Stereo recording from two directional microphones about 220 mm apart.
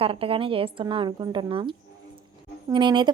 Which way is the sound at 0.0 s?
25° right (ahead or behind).